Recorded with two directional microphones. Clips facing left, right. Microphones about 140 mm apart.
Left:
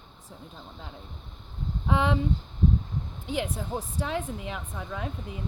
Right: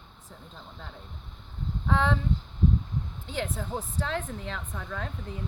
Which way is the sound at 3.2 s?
10° left (ahead or behind).